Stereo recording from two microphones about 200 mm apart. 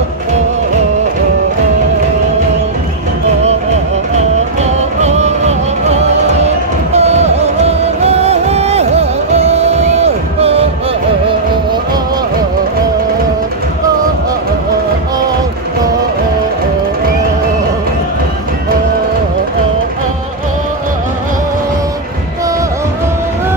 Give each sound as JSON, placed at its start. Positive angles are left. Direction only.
{"t": 4.6, "sound": "music", "side_deg": -35}